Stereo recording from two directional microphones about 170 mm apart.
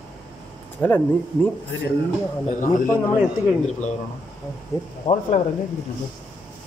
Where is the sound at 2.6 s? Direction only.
50° left (ahead or behind).